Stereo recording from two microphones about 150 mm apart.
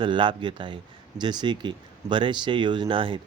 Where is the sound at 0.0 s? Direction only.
35° right (ahead or behind).